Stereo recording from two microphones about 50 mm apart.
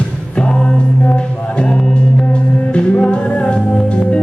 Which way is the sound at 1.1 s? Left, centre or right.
Left.